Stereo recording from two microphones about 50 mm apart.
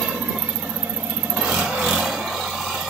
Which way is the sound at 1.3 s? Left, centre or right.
Centre.